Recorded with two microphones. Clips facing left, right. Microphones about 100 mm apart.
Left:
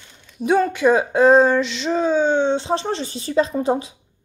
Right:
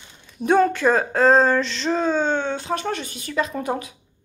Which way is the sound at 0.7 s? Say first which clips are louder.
Left 3 dB; 10° left (ahead or behind).